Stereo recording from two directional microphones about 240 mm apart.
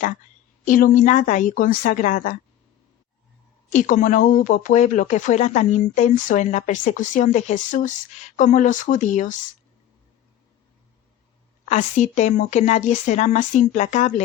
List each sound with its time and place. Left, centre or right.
0.6 s speech: left
3.7 s speech: left
11.7 s a woman's voice: left